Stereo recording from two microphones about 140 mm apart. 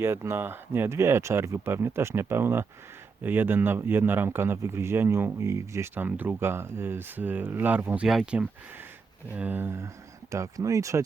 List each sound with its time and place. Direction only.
0.0 s speech: 20° right (ahead or behind)